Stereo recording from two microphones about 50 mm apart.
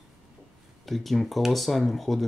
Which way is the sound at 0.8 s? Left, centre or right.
Centre.